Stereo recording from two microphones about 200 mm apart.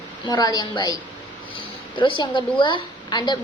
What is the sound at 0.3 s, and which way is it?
Speech, 20° left (ahead or behind).